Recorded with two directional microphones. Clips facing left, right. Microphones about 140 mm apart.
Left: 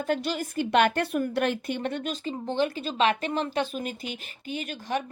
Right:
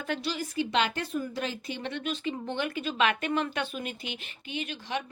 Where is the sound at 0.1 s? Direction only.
50° left (ahead or behind).